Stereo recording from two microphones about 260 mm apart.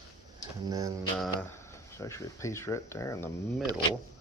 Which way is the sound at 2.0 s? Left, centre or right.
Centre.